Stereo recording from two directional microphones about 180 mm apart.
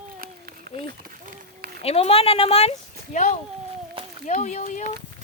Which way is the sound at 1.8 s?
35° left (ahead or behind).